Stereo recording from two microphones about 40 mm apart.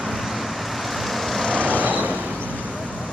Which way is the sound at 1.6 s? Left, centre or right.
Right.